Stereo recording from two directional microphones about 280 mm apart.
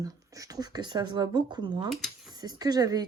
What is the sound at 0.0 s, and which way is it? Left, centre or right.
Speech, centre.